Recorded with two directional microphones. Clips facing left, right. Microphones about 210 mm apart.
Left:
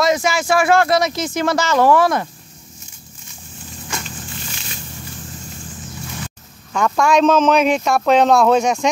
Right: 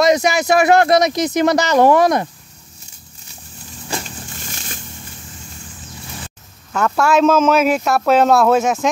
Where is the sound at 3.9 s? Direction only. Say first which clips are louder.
Right 4 dB; 35° right (ahead or behind).